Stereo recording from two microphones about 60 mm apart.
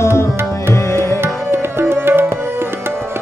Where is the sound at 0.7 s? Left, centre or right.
Left.